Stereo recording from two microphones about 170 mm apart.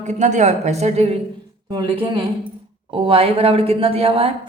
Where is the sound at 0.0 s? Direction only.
45° right (ahead or behind).